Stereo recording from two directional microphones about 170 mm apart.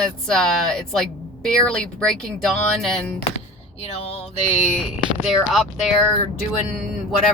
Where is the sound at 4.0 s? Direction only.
40° left (ahead or behind).